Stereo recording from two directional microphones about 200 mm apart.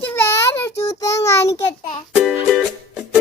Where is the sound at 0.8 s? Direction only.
15° left (ahead or behind).